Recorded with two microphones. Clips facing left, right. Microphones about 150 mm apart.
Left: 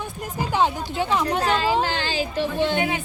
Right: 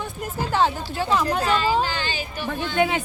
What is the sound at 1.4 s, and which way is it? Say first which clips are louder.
Speech: even; 75° left (ahead or behind).